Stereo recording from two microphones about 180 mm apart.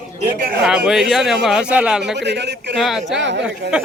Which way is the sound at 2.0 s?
70° right (ahead or behind).